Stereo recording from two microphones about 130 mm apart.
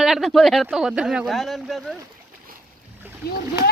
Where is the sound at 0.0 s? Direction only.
Centre (ahead or behind).